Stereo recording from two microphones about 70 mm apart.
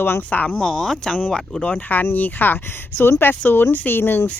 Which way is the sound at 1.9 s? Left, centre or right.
Left.